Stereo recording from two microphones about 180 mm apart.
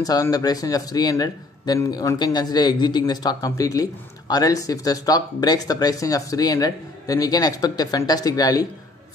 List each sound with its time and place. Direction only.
0.0 s speech: 20° left (ahead or behind)